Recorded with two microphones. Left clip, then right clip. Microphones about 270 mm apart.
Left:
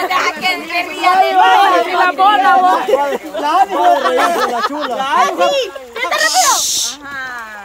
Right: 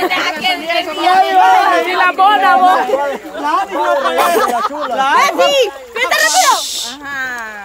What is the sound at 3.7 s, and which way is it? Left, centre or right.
Speech, left.